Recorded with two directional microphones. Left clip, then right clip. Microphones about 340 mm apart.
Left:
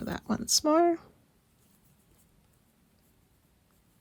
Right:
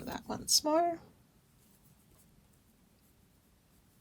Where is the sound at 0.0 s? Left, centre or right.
Centre.